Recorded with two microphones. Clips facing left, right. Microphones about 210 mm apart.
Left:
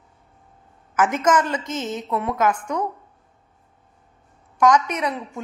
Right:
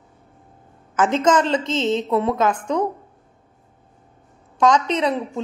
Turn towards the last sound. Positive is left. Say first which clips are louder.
# right 5 dB
turn(degrees=-20)  # may be behind; listen again after turning